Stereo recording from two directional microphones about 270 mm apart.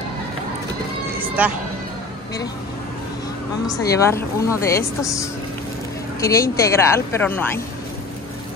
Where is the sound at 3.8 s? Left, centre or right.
Centre.